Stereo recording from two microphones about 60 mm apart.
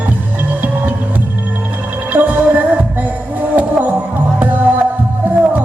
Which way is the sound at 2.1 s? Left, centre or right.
Right.